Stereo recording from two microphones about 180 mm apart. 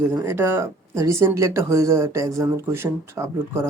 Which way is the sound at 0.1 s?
10° right (ahead or behind).